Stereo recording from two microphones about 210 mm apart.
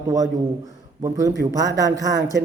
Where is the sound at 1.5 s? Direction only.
15° right (ahead or behind).